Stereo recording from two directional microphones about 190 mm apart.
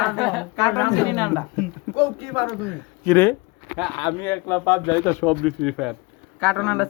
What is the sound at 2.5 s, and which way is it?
Speech, 10° left (ahead or behind).